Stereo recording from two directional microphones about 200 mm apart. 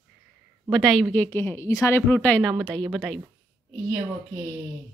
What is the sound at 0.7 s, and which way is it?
Speech, centre (ahead or behind).